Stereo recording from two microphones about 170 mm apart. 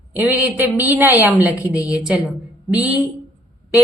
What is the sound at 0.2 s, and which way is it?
A woman's voice, 10° right (ahead or behind).